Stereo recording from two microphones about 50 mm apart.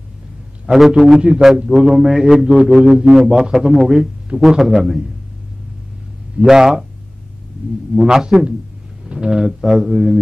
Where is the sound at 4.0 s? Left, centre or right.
Centre.